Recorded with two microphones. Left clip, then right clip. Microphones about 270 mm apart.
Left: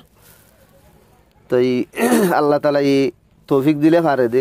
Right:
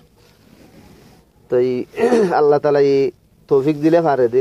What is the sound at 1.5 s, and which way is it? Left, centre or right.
Speech, left.